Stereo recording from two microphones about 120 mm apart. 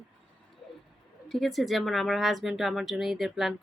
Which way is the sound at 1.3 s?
Centre (ahead or behind).